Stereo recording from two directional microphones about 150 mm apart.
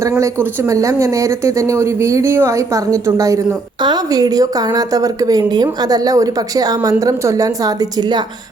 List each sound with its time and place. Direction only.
0.2 s a woman's voice: 15° right (ahead or behind)